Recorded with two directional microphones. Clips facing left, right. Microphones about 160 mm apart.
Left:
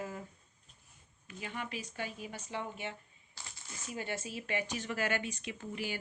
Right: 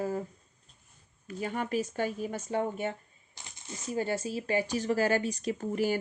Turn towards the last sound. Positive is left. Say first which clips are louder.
# right 11 dB
turn(degrees=-45)  # may be behind; listen again after turning